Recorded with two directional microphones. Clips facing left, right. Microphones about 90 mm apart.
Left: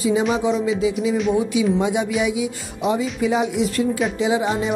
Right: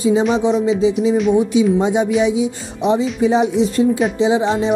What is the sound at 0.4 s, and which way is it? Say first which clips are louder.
Speech: right 4 dB; 25° right (ahead or behind).